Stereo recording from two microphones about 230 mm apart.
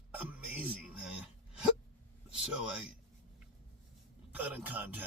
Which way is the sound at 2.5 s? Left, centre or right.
Centre.